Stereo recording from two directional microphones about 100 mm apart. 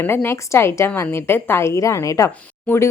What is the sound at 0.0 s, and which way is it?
A woman's voice, 20° left (ahead or behind).